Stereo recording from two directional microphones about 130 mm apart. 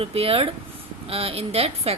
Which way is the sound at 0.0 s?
45° right (ahead or behind).